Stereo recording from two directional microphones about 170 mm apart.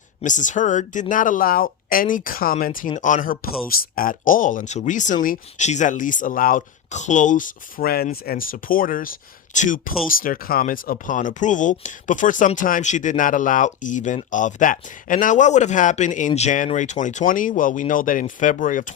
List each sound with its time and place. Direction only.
0.2 s speech: 45° left (ahead or behind)